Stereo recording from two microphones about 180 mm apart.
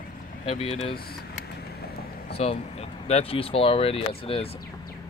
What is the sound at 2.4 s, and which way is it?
Speech, 35° left (ahead or behind).